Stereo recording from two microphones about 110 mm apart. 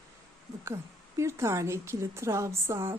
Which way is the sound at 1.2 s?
25° right (ahead or behind).